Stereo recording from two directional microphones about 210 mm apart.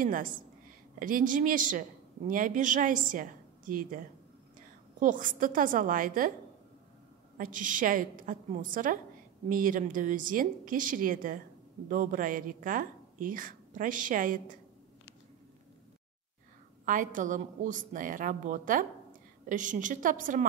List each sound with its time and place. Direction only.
0.0 s a woman's voice: 40° right (ahead or behind)
5.0 s a woman's voice: 40° right (ahead or behind)
7.3 s a woman's voice: 40° right (ahead or behind)
16.8 s a woman's voice: 40° right (ahead or behind)